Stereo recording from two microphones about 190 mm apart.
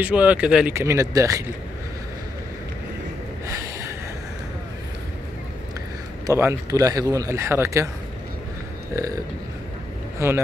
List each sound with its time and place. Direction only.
0.0 s speech: 5° right (ahead or behind)
6.2 s speech: 15° right (ahead or behind)
8.9 s speech: 15° right (ahead or behind)